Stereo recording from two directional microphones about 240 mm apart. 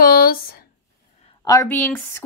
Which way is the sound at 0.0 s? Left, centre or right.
Left.